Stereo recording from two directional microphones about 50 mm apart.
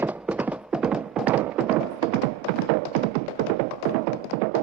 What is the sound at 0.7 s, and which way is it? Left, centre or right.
Music, centre.